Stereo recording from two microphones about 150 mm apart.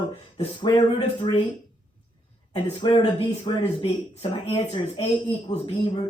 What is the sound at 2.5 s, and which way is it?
Speech, 35° left (ahead or behind).